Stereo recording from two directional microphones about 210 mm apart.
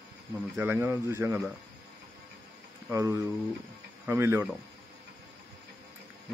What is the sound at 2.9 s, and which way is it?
Speech, 15° right (ahead or behind).